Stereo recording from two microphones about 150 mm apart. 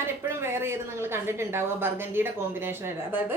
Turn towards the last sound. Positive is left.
turn(degrees=-15)  # may be behind; listen again after turning